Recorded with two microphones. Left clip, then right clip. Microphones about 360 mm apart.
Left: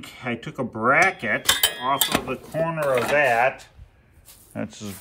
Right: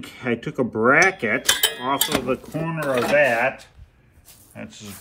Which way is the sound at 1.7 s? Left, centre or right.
Left.